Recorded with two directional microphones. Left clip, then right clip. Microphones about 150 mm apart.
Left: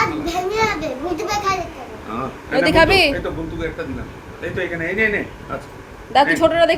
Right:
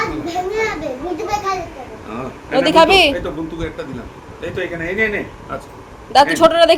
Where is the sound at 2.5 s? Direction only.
15° right (ahead or behind).